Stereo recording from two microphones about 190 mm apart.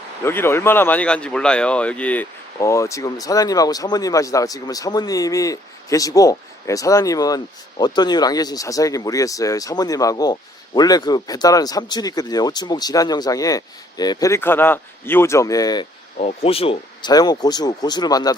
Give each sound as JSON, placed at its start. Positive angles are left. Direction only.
{"t": 0.2, "sound": "speech", "side_deg": 10}
{"t": 16.2, "sound": "speech", "side_deg": 30}